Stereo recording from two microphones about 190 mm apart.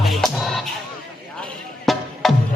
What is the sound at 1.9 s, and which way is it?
Music, centre (ahead or behind).